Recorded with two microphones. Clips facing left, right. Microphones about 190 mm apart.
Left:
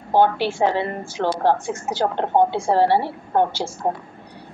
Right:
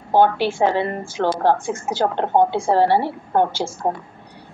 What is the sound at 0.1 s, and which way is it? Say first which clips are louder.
A woman's voice: right 1 dB; 50° right (ahead or behind).